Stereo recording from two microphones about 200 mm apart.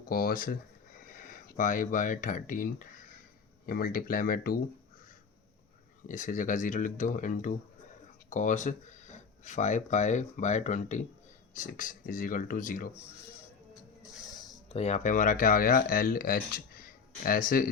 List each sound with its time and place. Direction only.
0.1 s speech: 45° left (ahead or behind)
6.1 s speech: 40° left (ahead or behind)
14.7 s speech: 35° left (ahead or behind)